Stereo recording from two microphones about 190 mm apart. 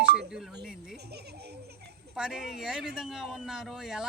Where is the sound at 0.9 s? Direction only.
60° right (ahead or behind).